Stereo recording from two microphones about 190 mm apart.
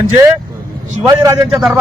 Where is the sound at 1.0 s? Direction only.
15° right (ahead or behind).